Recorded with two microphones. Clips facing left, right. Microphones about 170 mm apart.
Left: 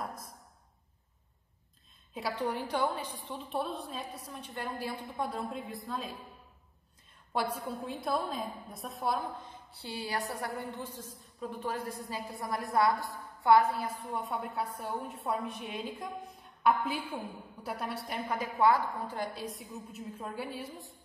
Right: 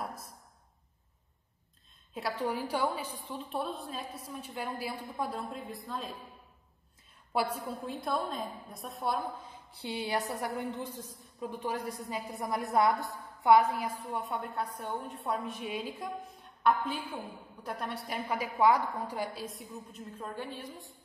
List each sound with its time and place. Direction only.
2.1 s a woman's voice: centre (ahead or behind)
7.3 s a woman's voice: centre (ahead or behind)
9.7 s a woman's voice: 20° right (ahead or behind)
14.0 s a woman's voice: centre (ahead or behind)